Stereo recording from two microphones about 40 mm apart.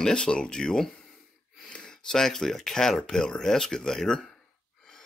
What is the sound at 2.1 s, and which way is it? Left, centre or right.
Speech, centre.